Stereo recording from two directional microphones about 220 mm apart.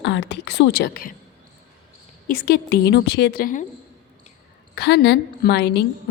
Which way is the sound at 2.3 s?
45° left (ahead or behind).